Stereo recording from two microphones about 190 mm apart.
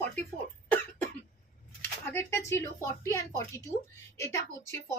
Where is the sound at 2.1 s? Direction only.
15° left (ahead or behind).